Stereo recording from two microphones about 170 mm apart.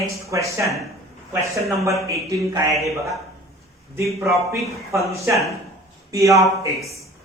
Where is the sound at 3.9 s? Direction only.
15° right (ahead or behind).